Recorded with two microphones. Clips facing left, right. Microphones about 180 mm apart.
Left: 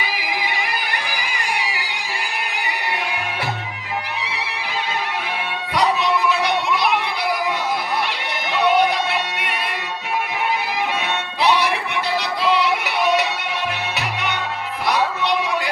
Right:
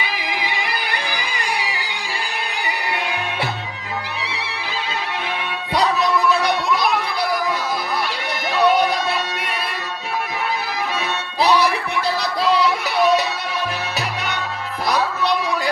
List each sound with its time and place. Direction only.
5.7 s music: 40° right (ahead or behind)
11.3 s music: 35° right (ahead or behind)
14.8 s a sound: 40° right (ahead or behind)